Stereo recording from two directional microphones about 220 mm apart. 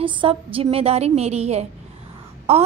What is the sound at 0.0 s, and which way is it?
Speech, 25° right (ahead or behind).